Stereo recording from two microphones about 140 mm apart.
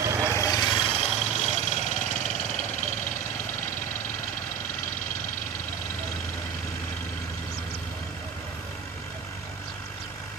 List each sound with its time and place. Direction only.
0.0 s vehicle: 20° right (ahead or behind)
0.3 s vehicle: 20° left (ahead or behind); by 2.6 s 60° left (ahead or behind)